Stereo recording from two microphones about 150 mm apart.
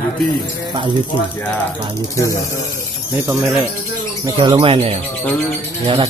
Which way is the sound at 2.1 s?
20° left (ahead or behind).